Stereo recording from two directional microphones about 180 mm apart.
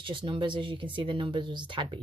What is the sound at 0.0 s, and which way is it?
Speech, 25° right (ahead or behind).